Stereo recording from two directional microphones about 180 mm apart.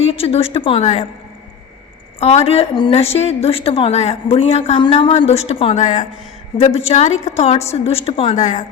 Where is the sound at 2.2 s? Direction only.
35° left (ahead or behind).